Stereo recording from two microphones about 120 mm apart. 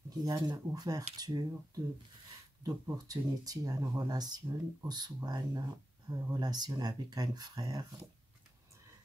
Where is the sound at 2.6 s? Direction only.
30° right (ahead or behind).